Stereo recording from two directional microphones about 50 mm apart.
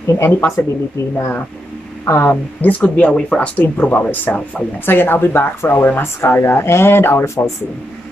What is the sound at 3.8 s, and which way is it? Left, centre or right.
Speech, left.